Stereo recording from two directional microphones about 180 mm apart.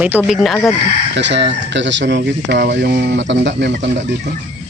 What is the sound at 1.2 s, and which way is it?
Speech, 75° right (ahead or behind).